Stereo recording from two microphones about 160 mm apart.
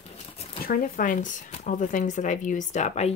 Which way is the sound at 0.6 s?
60° left (ahead or behind).